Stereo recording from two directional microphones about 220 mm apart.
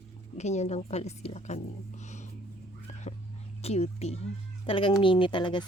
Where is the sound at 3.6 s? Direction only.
30° left (ahead or behind).